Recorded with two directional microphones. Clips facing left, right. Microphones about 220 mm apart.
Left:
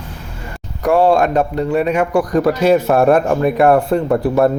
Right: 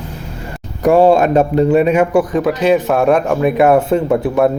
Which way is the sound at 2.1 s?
Centre (ahead or behind).